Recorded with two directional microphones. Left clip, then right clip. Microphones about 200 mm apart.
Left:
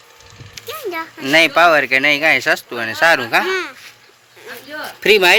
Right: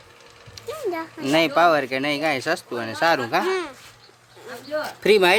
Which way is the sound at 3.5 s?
20° right (ahead or behind).